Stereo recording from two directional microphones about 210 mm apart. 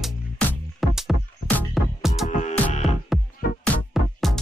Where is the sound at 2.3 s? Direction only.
35° left (ahead or behind).